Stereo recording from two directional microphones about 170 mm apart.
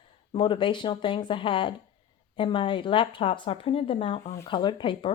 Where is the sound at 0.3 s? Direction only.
30° left (ahead or behind).